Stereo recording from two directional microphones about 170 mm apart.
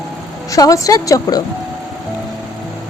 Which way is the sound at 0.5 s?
20° left (ahead or behind).